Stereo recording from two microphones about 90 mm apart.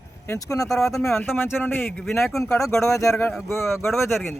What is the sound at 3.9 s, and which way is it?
Speech, centre (ahead or behind).